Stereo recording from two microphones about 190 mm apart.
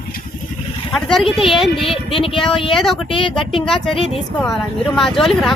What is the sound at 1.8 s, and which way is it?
Speech, 30° left (ahead or behind).